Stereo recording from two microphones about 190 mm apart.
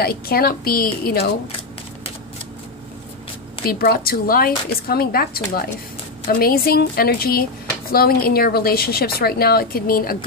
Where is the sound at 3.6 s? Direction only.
55° left (ahead or behind).